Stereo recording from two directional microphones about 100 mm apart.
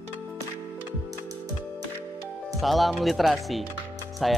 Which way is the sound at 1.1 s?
35° right (ahead or behind).